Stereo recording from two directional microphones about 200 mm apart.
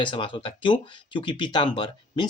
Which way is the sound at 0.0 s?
25° left (ahead or behind).